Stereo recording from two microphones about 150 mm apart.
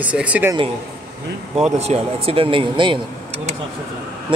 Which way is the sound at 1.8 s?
40° right (ahead or behind).